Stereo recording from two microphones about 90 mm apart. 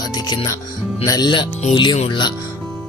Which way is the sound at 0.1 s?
50° left (ahead or behind).